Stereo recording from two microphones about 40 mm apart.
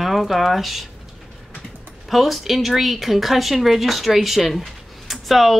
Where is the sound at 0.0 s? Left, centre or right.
Centre.